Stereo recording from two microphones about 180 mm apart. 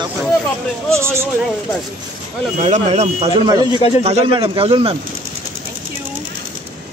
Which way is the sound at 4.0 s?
30° right (ahead or behind).